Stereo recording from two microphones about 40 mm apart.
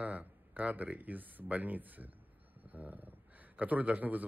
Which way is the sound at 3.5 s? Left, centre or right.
Right.